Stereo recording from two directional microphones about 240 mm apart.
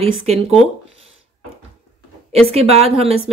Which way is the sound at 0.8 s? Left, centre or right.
Right.